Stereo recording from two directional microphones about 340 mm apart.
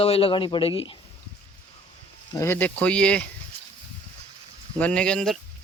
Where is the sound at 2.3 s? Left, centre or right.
Centre.